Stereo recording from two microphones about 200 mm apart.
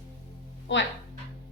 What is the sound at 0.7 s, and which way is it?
Speech, 65° left (ahead or behind).